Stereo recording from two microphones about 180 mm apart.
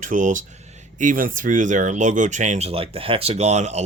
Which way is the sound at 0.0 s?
45° right (ahead or behind).